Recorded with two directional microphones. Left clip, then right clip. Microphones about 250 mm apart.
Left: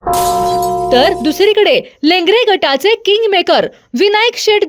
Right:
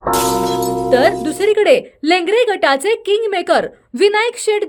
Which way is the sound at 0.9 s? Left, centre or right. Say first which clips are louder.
Left 2 dB; left.